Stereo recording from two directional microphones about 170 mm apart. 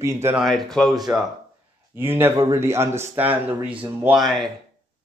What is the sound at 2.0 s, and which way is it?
Speech, 10° right (ahead or behind).